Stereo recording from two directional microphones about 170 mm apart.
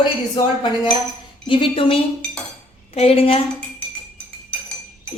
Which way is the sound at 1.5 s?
30° left (ahead or behind).